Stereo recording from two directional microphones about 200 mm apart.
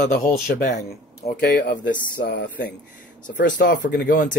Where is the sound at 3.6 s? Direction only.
50° left (ahead or behind).